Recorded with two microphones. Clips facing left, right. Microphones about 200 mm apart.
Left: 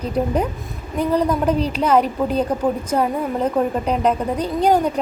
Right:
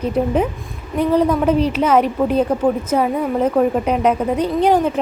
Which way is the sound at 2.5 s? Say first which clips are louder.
Right 3 dB; 10° left (ahead or behind).